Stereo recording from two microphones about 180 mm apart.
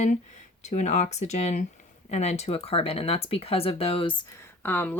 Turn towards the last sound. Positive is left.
turn(degrees=10)  # may be behind; listen again after turning